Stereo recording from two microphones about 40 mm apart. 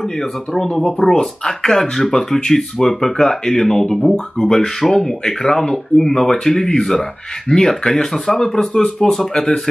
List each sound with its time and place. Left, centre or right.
0.0 s speech: centre
4.7 s speech: centre